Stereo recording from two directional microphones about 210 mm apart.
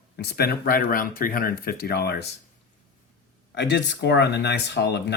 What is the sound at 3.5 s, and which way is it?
Speech, 55° left (ahead or behind).